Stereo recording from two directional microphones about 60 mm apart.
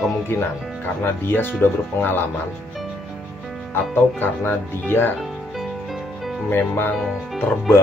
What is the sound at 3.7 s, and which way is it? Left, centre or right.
Speech, left.